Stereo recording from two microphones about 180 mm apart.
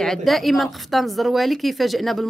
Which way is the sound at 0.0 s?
Centre (ahead or behind).